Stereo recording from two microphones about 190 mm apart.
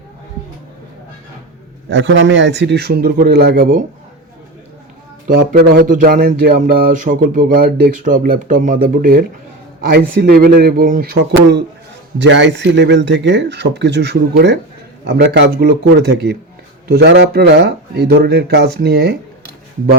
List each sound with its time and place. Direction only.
1.9 s speech: 75° right (ahead or behind); by 3.8 s 45° right (ahead or behind)
5.3 s a sound: 55° right (ahead or behind)
12.2 s speech: 70° right (ahead or behind)